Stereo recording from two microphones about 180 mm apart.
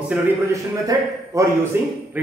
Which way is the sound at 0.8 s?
20° right (ahead or behind).